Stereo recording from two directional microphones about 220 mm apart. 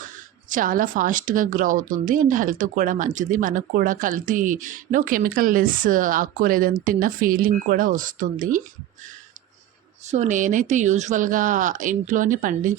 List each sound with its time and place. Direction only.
0.5 s a woman's voice: 40° right (ahead or behind)
10.1 s a woman's voice: 35° right (ahead or behind)